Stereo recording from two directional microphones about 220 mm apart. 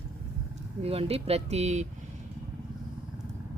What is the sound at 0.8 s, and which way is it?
Speech, 25° right (ahead or behind).